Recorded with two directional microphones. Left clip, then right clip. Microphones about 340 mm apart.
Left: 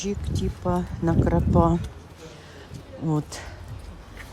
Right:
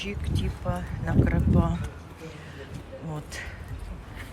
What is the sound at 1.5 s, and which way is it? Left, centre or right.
Speech, right.